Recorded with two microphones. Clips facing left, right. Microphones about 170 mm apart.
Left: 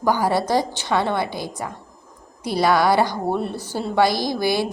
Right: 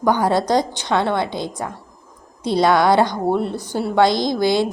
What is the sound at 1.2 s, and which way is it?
A woman's voice, 20° right (ahead or behind).